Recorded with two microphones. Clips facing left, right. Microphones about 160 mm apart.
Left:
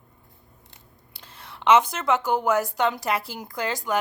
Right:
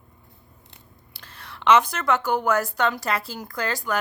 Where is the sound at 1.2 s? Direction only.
20° left (ahead or behind).